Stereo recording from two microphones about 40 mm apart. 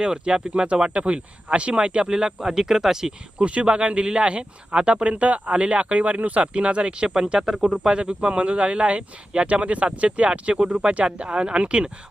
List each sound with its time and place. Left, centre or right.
0.0 s speech: right
3.3 s speech: right
7.3 s speech: centre
7.9 s speech: right